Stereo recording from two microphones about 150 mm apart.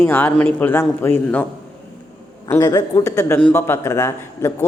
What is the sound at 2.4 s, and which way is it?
A man's voice, 25° left (ahead or behind).